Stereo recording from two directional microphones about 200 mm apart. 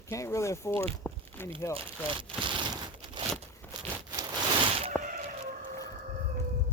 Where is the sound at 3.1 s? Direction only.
25° right (ahead or behind).